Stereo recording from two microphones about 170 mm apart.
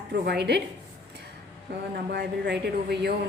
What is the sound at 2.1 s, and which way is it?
A woman's voice, 85° right.